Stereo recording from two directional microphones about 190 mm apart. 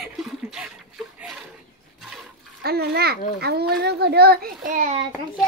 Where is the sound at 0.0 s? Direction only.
Centre (ahead or behind).